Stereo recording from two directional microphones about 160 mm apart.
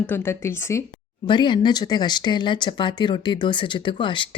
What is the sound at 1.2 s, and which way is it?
Speech, 30° left (ahead or behind).